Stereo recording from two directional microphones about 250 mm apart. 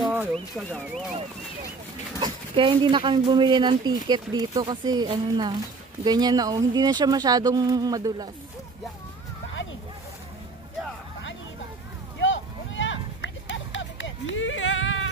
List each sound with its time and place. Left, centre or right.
0.0 s horse: centre
0.3 s speech: centre
2.1 s speech: centre
12.2 s music: left